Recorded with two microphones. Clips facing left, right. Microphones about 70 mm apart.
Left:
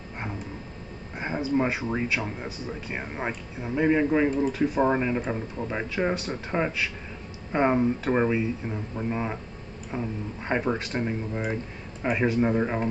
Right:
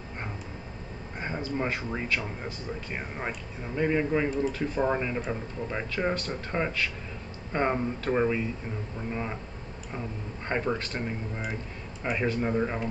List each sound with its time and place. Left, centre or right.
1.2 s speech: centre
9.9 s speech: centre